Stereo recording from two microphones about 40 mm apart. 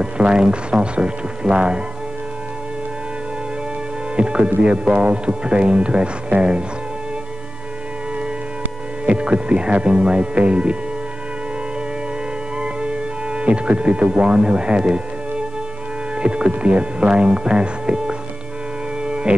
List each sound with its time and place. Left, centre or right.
0.0 s speech: right
4.2 s speech: right
9.0 s speech: right
12.5 s music: right
16.2 s speech: right
19.0 s music: right